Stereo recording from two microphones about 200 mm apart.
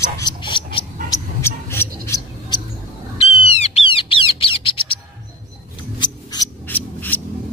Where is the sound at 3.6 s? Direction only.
30° left (ahead or behind).